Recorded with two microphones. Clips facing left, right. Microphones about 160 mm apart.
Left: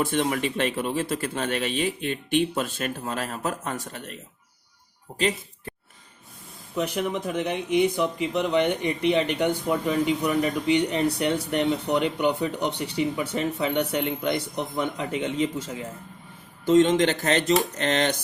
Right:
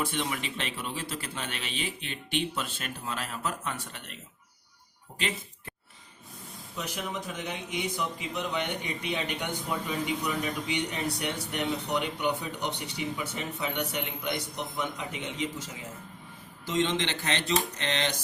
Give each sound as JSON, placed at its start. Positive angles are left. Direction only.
{"t": 0.0, "sound": "speech", "side_deg": 50}
{"t": 6.7, "sound": "speech", "side_deg": 60}